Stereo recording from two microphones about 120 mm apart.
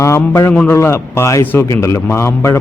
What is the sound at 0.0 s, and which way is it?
Speech, 25° left (ahead or behind).